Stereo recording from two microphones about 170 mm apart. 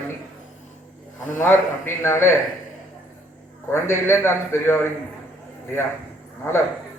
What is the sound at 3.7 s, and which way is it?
A man's voice, 15° left (ahead or behind).